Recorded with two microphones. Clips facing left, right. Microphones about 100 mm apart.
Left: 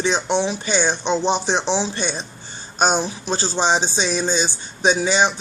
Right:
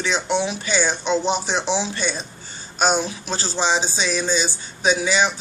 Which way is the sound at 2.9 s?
15° left (ahead or behind).